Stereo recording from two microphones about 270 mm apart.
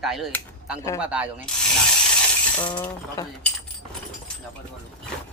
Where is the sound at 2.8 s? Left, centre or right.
Centre.